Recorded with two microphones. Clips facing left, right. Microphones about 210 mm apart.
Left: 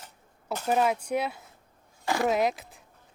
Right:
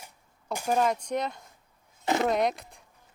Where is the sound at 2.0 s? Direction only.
20° right (ahead or behind).